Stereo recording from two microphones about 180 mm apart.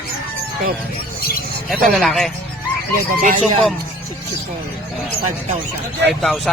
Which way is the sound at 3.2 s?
45° right (ahead or behind).